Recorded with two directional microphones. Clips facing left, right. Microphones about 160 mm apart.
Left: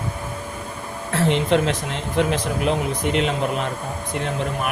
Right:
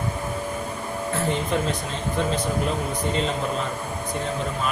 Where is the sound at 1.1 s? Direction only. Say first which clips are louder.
Left 6 dB; 75° left (ahead or behind).